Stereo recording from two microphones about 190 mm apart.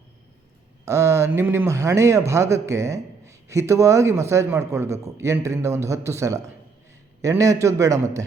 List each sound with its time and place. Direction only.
0.9 s speech: 15° right (ahead or behind)